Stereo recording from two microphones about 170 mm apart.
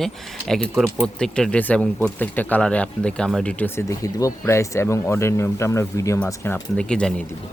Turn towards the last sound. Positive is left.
turn(degrees=5)  # may be behind; listen again after turning